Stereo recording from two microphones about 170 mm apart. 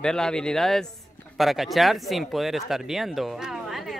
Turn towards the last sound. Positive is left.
turn(degrees=0)  # may be behind; listen again after turning